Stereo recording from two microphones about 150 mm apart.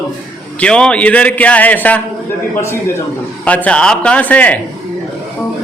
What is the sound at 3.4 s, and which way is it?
A man's voice, 10° left (ahead or behind).